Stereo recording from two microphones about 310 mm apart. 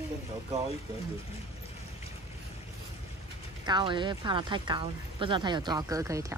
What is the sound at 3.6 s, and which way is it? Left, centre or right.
Speech, centre.